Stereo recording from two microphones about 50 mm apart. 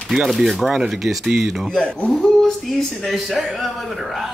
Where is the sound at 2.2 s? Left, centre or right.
Centre.